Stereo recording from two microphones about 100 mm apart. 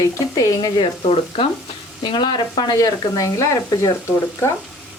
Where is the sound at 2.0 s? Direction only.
50° left (ahead or behind); by 4.5 s 30° left (ahead or behind).